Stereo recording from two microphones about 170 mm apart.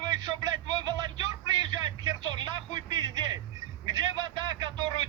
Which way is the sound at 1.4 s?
25° right (ahead or behind).